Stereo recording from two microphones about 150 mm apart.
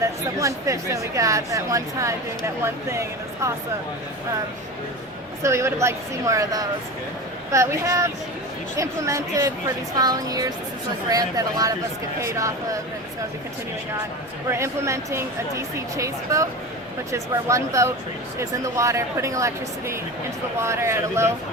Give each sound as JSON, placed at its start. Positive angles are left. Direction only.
{"t": 0.0, "sound": "speech", "side_deg": -20}
{"t": 5.4, "sound": "speech", "side_deg": -20}
{"t": 14.5, "sound": "speech", "side_deg": -20}